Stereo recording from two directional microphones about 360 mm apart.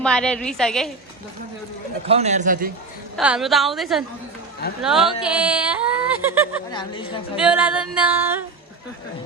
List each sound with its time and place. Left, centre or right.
0.0 s speech: centre
2.0 s a man's voice: centre
3.2 s speech: centre
6.7 s a woman's voice: centre
7.3 s speech: centre